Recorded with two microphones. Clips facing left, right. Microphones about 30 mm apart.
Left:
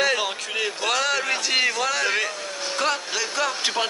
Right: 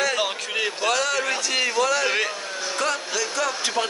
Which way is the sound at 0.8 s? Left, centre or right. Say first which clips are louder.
Even; centre.